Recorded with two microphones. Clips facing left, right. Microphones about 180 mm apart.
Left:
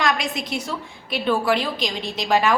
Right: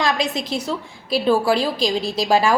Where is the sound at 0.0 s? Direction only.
30° right (ahead or behind).